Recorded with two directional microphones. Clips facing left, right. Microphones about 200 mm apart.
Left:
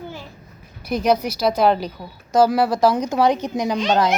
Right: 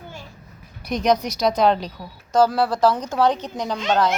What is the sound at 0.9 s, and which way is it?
Speech, 5° left (ahead or behind).